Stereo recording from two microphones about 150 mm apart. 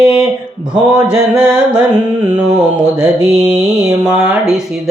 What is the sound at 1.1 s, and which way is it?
Speech, 10° right (ahead or behind).